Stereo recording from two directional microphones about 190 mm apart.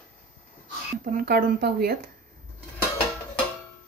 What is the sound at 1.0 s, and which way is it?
Speech, 50° right (ahead or behind).